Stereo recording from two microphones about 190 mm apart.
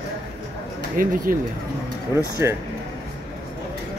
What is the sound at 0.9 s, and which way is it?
Speech, 50° right (ahead or behind).